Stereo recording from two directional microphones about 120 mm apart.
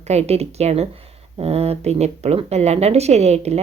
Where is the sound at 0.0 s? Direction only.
60° right (ahead or behind).